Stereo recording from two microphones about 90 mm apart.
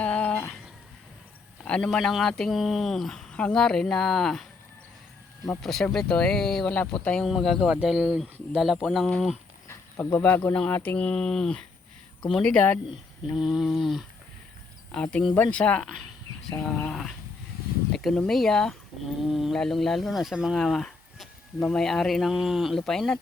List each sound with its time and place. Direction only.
0.0 s a sound: 15° left (ahead or behind)
1.6 s speech: 10° left (ahead or behind)
5.6 s speech: 5° left (ahead or behind)
10.0 s speech: 20° left (ahead or behind)
13.3 s speech: 5° right (ahead or behind)
14.9 s speech: 10° left (ahead or behind)